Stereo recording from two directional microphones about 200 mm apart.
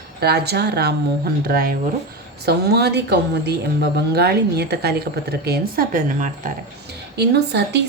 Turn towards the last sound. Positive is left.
turn(degrees=-55)  # may be behind; listen again after turning